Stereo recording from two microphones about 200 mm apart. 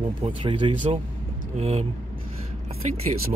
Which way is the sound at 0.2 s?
30° right (ahead or behind).